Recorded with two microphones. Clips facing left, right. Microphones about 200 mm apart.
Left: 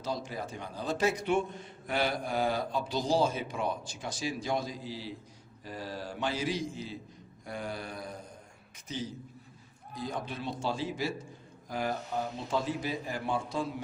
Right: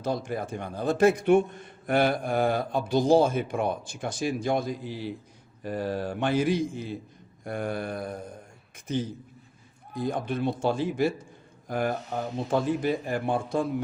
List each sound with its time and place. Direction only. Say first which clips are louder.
0.0 s a man's voice: right 6 dB; 55° right (ahead or behind)